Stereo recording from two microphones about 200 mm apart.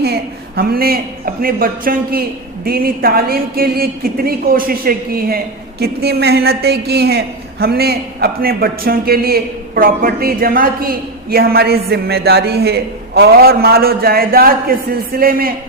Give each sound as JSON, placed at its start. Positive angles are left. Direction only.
{"t": 0.0, "sound": "a man's voice", "side_deg": -50}